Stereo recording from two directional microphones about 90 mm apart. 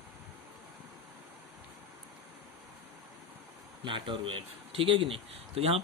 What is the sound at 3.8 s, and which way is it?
Speech, 65° right (ahead or behind).